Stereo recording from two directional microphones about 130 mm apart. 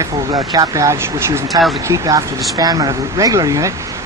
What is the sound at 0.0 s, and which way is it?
Speech, 30° right (ahead or behind).